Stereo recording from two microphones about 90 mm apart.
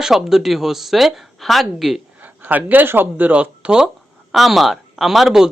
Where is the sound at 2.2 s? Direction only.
20° right (ahead or behind).